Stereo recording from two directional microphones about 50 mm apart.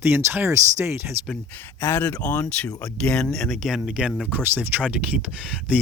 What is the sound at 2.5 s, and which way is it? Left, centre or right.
Speech, centre.